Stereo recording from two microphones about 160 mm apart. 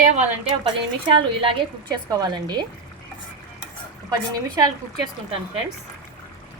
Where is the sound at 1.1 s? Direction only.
35° right (ahead or behind).